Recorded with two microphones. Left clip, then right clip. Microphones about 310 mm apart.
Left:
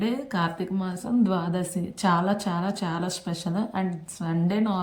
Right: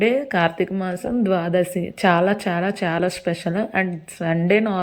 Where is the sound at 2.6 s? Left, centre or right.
Centre.